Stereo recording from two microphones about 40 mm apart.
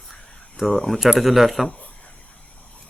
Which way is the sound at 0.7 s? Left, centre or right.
Centre.